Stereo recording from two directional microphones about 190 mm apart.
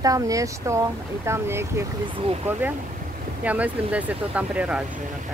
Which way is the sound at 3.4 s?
5° right (ahead or behind).